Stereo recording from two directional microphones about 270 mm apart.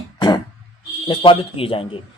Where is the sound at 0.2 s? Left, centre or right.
Centre.